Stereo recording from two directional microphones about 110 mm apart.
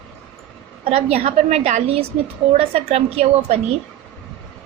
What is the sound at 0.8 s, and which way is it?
A woman's voice, 65° right (ahead or behind).